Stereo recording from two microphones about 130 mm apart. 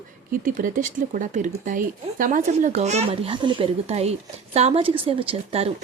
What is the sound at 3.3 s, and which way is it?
Speech, 40° right (ahead or behind).